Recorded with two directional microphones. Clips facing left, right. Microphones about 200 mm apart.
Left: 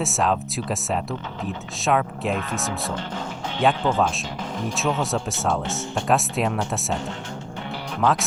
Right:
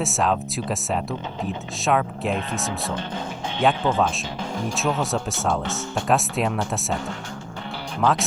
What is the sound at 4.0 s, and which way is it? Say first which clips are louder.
Speech: even; centre (ahead or behind).